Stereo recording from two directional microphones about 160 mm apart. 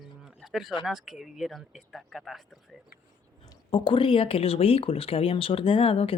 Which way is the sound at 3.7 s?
35° left (ahead or behind).